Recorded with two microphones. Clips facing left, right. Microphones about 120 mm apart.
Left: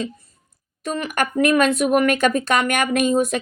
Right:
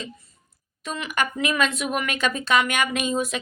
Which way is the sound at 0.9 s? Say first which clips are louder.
Left 4 dB; 50° left (ahead or behind).